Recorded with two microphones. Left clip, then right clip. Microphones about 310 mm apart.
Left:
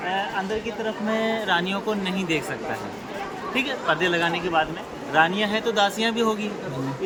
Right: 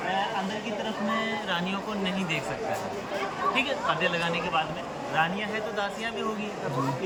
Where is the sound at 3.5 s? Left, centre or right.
Centre.